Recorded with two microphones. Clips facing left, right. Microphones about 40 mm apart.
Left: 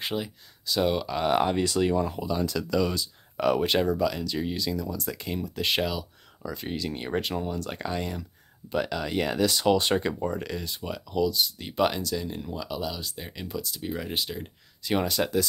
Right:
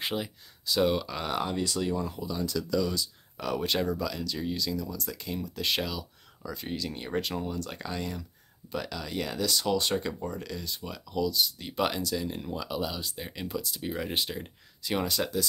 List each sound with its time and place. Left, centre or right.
0.0 s speech: centre
1.2 s speech: left
3.6 s speech: left
5.1 s speech: left
5.4 s speech: centre
11.7 s speech: centre
14.8 s speech: centre